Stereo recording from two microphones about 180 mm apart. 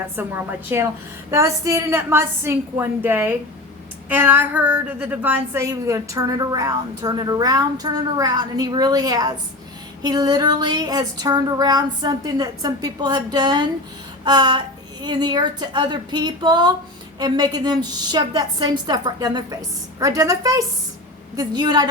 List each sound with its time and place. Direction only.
0.2 s a woman's voice: 10° right (ahead or behind)